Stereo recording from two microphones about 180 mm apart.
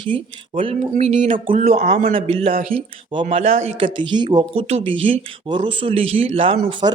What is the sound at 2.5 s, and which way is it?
Speech, 50° right (ahead or behind).